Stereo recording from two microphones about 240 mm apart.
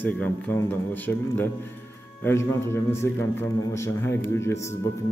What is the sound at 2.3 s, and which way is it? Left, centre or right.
A man's voice, centre.